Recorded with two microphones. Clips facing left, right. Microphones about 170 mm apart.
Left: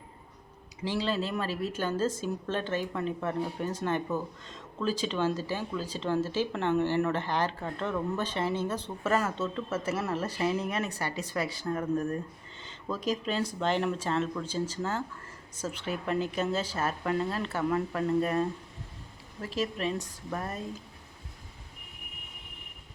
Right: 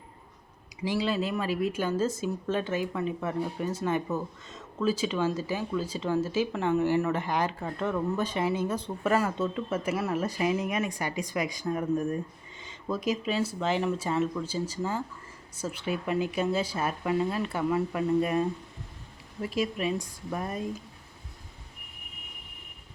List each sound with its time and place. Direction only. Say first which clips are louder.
0.8 s a woman's voice: right 2 dB; 10° right (ahead or behind)
19.5 s a woman's voice: right 2 dB; 10° right (ahead or behind)